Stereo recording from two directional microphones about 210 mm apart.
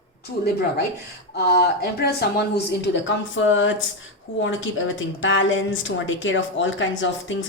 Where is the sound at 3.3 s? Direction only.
65° left (ahead or behind).